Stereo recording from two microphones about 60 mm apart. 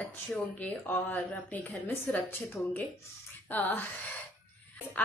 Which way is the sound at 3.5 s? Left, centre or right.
Left.